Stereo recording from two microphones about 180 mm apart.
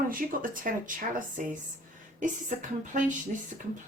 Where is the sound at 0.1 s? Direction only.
50° right (ahead or behind).